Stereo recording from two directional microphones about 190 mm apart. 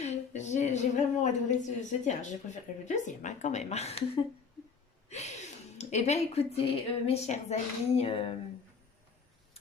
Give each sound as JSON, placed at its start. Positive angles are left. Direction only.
{"t": 0.0, "sound": "a woman's voice", "side_deg": 35}
{"t": 5.0, "sound": "gasp", "side_deg": 35}
{"t": 7.0, "sound": "a woman's voice", "side_deg": 35}